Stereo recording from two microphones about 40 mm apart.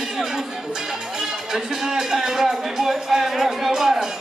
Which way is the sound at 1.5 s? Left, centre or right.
Centre.